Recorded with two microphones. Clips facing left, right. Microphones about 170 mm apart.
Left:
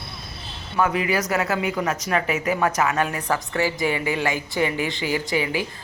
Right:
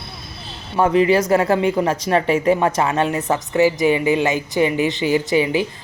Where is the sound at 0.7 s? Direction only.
30° right (ahead or behind).